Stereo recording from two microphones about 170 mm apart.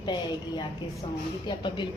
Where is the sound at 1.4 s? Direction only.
25° left (ahead or behind).